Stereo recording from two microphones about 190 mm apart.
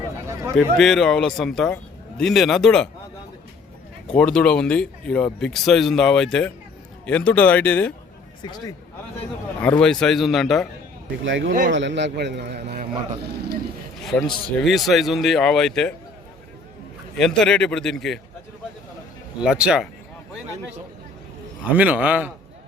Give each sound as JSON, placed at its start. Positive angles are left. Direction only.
{"t": 0.5, "sound": "a man's voice", "side_deg": 0}
{"t": 4.1, "sound": "a man's voice", "side_deg": 5}
{"t": 8.4, "sound": "speech", "side_deg": 20}
{"t": 9.6, "sound": "a man's voice", "side_deg": 5}
{"t": 11.2, "sound": "speech", "side_deg": -85}
{"t": 11.7, "sound": "a man's voice", "side_deg": -70}
{"t": 14.0, "sound": "a sound", "side_deg": 0}
{"t": 14.6, "sound": "a man's voice", "side_deg": 0}
{"t": 17.2, "sound": "a man's voice", "side_deg": 5}
{"t": 19.4, "sound": "a man's voice", "side_deg": -5}
{"t": 21.8, "sound": "a man's voice", "side_deg": -10}